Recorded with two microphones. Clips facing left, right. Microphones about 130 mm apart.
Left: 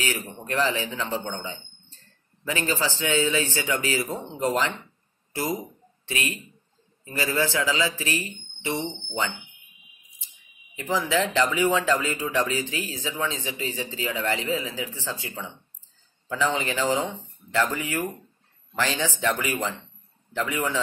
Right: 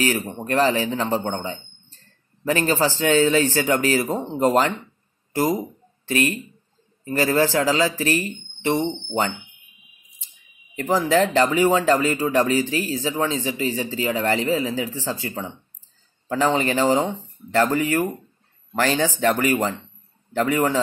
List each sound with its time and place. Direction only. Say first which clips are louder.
0.2 s speech: right 6 dB; 35° right (ahead or behind)
10.8 s speech: right 6 dB; 45° right (ahead or behind)